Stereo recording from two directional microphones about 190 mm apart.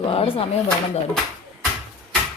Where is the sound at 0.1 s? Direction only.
30° left (ahead or behind).